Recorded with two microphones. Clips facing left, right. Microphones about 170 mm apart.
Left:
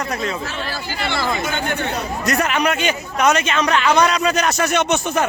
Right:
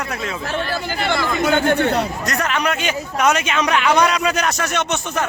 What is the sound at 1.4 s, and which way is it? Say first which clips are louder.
Speech: right 7 dB; 65° right (ahead or behind).